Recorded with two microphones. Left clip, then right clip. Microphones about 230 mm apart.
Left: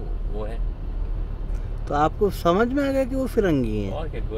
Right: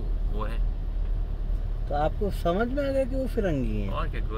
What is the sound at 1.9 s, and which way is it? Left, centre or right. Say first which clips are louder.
Speech: left 7 dB; left.